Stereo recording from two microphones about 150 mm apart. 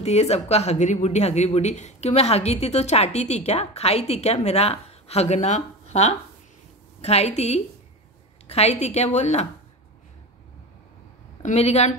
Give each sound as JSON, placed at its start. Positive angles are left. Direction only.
{"t": 0.0, "sound": "speech", "side_deg": 45}
{"t": 11.4, "sound": "speech", "side_deg": 45}